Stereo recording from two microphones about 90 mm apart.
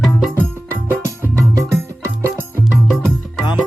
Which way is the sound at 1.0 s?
30° right (ahead or behind).